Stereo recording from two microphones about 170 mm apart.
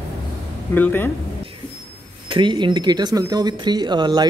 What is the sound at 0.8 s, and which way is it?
Speech, 10° left (ahead or behind).